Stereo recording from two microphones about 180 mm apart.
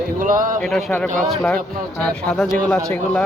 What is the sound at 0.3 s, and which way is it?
Speech, 45° right (ahead or behind).